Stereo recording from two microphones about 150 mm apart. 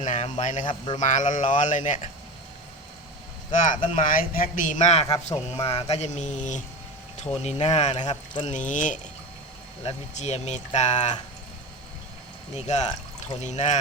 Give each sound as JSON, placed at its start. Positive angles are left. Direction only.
{"t": 0.0, "sound": "speech", "side_deg": 55}
{"t": 0.6, "sound": "speech", "side_deg": 30}
{"t": 0.9, "sound": "a man's voice", "side_deg": 55}
{"t": 3.5, "sound": "a man's voice", "side_deg": 60}
{"t": 5.0, "sound": "a man's voice", "side_deg": 25}
{"t": 5.5, "sound": "a sound", "side_deg": 40}
{"t": 8.0, "sound": "speech", "side_deg": 30}
{"t": 8.4, "sound": "a man's voice", "side_deg": 55}
{"t": 9.8, "sound": "a sound", "side_deg": 45}
{"t": 12.5, "sound": "a sound", "side_deg": 50}